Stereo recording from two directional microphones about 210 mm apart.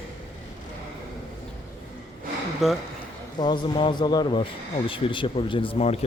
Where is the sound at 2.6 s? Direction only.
Centre (ahead or behind).